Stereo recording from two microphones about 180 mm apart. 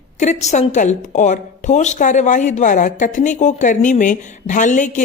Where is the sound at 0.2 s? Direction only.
40° left (ahead or behind).